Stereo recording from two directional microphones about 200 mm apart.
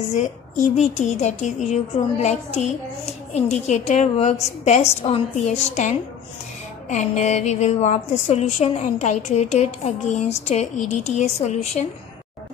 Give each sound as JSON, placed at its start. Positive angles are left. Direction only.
{"t": 0.1, "sound": "a woman's voice", "side_deg": 35}
{"t": 3.3, "sound": "a woman's voice", "side_deg": 35}